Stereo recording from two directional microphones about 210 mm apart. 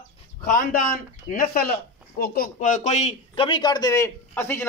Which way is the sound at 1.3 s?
40° left (ahead or behind).